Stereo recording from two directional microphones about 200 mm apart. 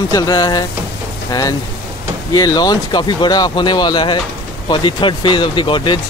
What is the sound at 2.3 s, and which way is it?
Speech, 20° left (ahead or behind).